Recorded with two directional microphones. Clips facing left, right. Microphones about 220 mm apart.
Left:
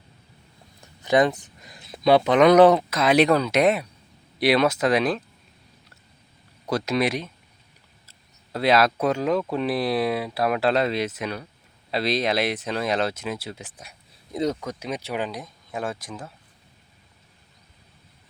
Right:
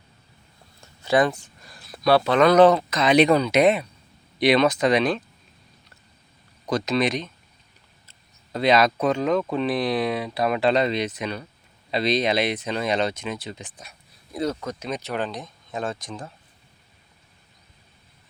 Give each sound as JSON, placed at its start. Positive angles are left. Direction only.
{"t": 0.8, "sound": "speech", "side_deg": 20}
{"t": 6.7, "sound": "speech", "side_deg": 10}
{"t": 8.5, "sound": "speech", "side_deg": 5}